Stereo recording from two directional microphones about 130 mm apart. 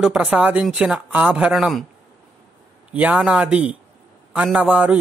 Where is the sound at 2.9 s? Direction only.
10° right (ahead or behind).